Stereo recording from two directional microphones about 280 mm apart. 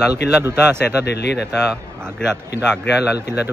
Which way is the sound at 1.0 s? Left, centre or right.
Left.